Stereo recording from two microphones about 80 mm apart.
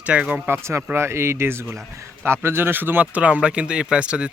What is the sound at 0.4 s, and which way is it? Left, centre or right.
Speech, right.